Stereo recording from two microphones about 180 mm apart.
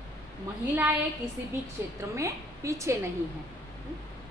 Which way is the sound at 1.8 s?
10° right (ahead or behind).